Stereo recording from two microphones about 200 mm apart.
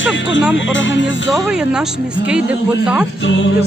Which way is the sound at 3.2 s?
65° left (ahead or behind).